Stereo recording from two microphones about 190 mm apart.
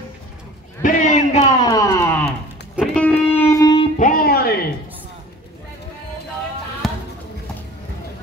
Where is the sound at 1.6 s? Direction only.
20° left (ahead or behind).